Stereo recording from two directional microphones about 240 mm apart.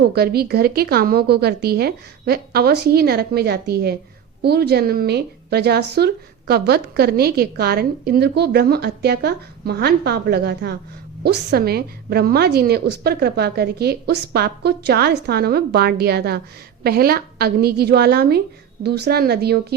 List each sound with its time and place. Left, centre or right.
0.1 s a woman's voice: right